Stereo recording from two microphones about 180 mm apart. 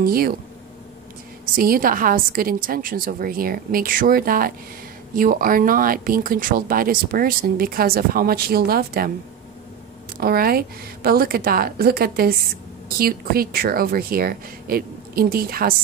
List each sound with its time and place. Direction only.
0.0 s speech: 55° right (ahead or behind)
1.4 s speech: 55° right (ahead or behind)
10.2 s speech: 55° right (ahead or behind)